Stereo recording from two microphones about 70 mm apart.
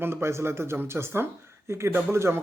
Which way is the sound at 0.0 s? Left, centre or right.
Right.